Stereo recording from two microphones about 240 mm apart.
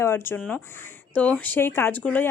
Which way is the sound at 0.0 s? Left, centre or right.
Centre.